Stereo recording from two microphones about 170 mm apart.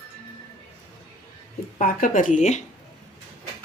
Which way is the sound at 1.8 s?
55° left (ahead or behind).